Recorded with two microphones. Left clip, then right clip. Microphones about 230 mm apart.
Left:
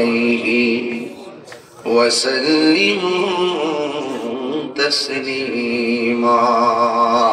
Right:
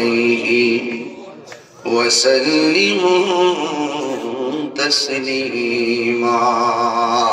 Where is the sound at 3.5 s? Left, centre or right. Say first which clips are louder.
Left 1 dB; left.